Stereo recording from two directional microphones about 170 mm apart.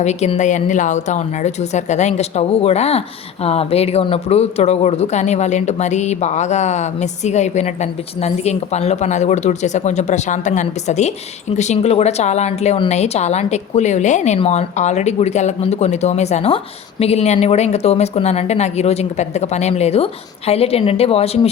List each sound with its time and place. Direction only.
0.0 s a woman's voice: 40° left (ahead or behind)